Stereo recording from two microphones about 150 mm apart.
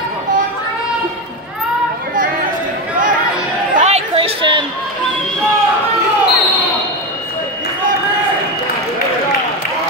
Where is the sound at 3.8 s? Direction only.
45° right (ahead or behind).